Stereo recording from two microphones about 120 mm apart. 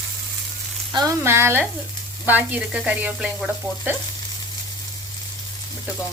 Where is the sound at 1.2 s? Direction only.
20° right (ahead or behind).